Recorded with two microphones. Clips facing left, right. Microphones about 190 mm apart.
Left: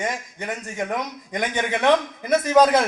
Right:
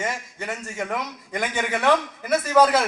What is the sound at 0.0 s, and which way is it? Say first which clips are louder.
A man's voice: left 1 dB; 15° left (ahead or behind).